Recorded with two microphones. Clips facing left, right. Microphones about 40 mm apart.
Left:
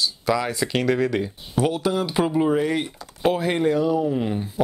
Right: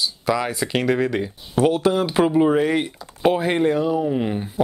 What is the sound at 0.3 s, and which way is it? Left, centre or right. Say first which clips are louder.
Speech: right 1 dB; centre.